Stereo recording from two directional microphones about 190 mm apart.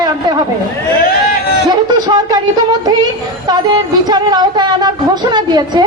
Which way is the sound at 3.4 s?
20° right (ahead or behind).